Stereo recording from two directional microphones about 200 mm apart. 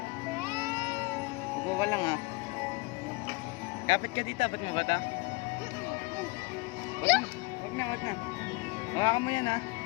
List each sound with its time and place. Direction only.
1.8 s speech: 20° left (ahead or behind)
3.8 s speech: 30° left (ahead or behind)
9.0 s speech: 20° left (ahead or behind)